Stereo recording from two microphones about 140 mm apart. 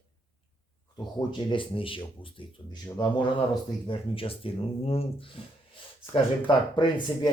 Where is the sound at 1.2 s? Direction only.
35° left (ahead or behind).